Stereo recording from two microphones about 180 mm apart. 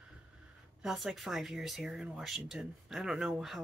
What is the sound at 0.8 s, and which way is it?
Speech, centre (ahead or behind).